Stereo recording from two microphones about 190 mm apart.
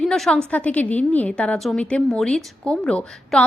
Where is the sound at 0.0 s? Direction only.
5° left (ahead or behind).